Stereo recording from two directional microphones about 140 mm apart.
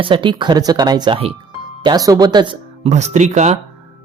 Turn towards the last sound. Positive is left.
turn(degrees=-55)  # may be behind; listen again after turning